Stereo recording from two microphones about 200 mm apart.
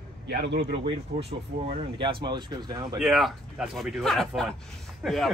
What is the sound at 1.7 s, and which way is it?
Speech, 25° right (ahead or behind).